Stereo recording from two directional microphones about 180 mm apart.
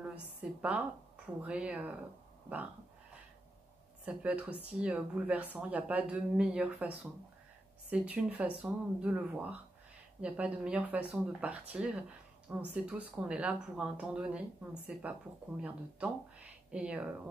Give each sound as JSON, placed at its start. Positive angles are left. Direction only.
{"t": 0.0, "sound": "a woman's voice", "side_deg": -10}
{"t": 4.0, "sound": "speech", "side_deg": -5}